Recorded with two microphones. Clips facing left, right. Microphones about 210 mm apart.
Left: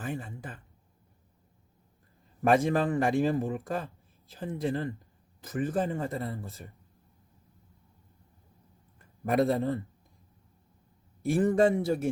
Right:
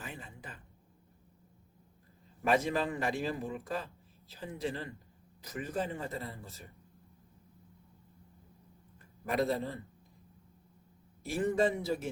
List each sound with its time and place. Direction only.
0.0 s a man's voice: 50° left (ahead or behind)
2.4 s a man's voice: 50° left (ahead or behind)
9.3 s a man's voice: 50° left (ahead or behind)
11.2 s a man's voice: 50° left (ahead or behind)